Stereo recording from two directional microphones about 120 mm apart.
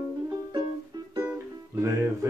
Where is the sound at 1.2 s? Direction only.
20° right (ahead or behind).